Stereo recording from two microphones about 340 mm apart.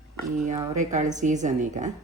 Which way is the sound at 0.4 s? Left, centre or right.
Centre.